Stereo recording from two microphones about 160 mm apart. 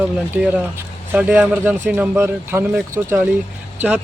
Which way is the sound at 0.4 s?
10° right (ahead or behind).